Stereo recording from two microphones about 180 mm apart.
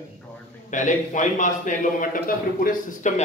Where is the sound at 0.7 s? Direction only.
45° left (ahead or behind).